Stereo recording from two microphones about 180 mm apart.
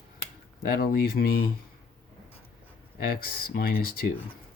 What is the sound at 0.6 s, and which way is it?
Speech, 55° left (ahead or behind).